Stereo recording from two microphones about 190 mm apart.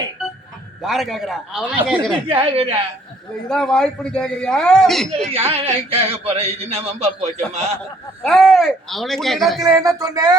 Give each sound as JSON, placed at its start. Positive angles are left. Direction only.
{"t": 0.8, "sound": "a man's voice", "side_deg": 0}
{"t": 2.2, "sound": "speech", "side_deg": -30}
{"t": 3.5, "sound": "a man's voice", "side_deg": 5}
{"t": 5.3, "sound": "a man's voice", "side_deg": -30}
{"t": 8.2, "sound": "a man's voice", "side_deg": 5}
{"t": 9.6, "sound": "speech", "side_deg": -15}